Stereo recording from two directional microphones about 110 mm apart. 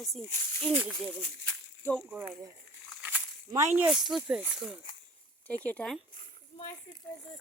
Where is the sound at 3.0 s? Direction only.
15° right (ahead or behind).